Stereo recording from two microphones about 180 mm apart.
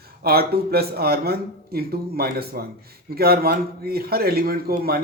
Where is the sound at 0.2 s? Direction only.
60° right (ahead or behind).